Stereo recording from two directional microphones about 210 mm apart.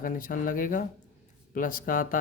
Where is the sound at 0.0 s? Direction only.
40° left (ahead or behind).